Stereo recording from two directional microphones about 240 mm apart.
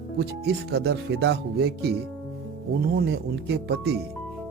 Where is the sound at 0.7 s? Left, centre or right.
Right.